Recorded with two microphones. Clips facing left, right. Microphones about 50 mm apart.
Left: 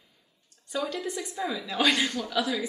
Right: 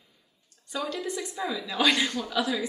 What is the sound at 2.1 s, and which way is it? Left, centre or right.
Speech, centre.